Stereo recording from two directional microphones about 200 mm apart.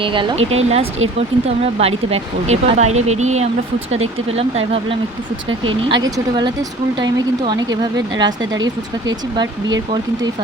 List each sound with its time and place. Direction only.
0.0 s speech: 25° right (ahead or behind)